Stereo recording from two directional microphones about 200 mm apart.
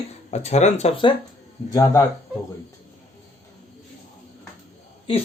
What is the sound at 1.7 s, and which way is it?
Speech, 15° left (ahead or behind).